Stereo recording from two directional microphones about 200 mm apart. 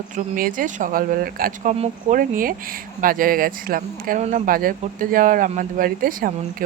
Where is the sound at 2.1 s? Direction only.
45° right (ahead or behind).